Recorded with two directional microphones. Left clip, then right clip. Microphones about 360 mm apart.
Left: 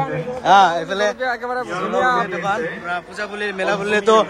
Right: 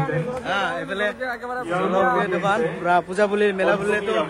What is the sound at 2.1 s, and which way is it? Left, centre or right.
A man's voice, centre.